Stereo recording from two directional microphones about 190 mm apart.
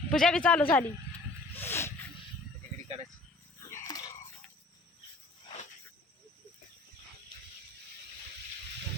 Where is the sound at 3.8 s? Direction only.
20° left (ahead or behind).